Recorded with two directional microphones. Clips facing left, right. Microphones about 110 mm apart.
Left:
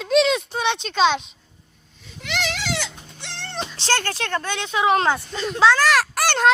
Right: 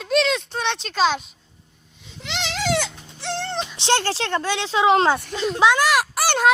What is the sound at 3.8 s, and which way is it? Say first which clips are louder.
A child's voice: right 3 dB; 25° right (ahead or behind).